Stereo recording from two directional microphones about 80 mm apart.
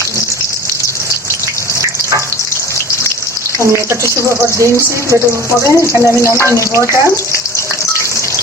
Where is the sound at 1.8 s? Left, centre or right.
Right.